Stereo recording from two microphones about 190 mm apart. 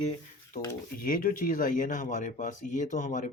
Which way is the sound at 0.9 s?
50° left (ahead or behind).